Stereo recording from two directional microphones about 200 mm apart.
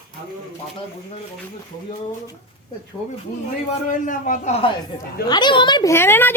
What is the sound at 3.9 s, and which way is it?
Speech, 40° left (ahead or behind).